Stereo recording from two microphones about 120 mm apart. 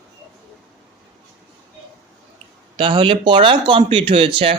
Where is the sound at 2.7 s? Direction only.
45° right (ahead or behind).